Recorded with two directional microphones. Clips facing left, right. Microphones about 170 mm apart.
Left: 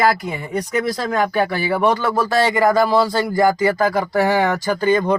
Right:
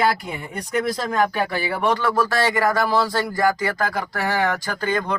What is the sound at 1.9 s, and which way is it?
Speech, 15° left (ahead or behind).